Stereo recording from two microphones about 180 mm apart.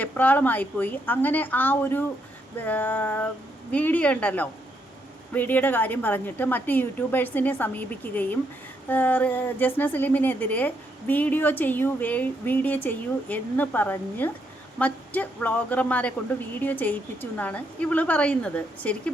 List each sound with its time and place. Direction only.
0.0 s a woman's voice: 10° left (ahead or behind)